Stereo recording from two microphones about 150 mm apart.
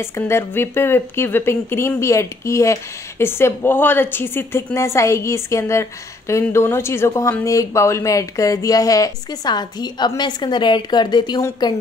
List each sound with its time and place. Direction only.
0.0 s speech: 15° left (ahead or behind)